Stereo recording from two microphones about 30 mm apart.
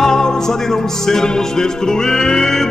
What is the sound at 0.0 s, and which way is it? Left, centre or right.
Music, centre.